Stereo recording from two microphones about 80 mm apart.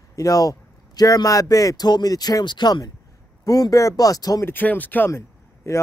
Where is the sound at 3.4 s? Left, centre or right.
Left.